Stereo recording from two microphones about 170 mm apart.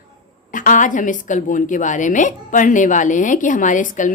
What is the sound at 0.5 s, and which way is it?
A woman's voice, 50° left (ahead or behind).